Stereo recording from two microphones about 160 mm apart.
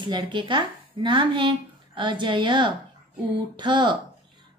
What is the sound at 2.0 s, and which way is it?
Mantra, 30° right (ahead or behind).